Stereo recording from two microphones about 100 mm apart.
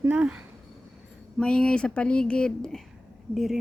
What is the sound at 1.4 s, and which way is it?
Speech, 10° left (ahead or behind).